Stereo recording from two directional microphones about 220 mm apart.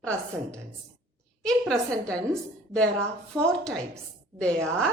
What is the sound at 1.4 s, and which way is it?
A woman's voice, 5° left (ahead or behind).